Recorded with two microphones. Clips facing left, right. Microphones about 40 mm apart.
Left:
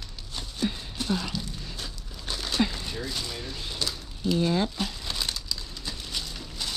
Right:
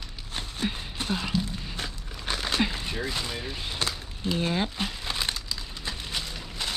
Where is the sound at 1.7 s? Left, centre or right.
Right.